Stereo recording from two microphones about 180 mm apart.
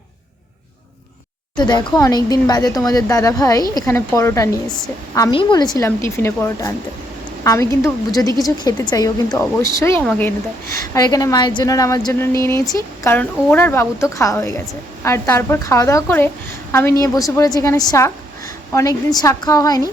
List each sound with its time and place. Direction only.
1.5 s speech: 25° left (ahead or behind)
5.7 s speech: 15° left (ahead or behind)